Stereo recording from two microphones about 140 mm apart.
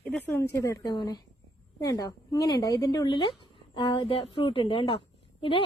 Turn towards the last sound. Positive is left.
turn(degrees=40)  # may be behind; listen again after turning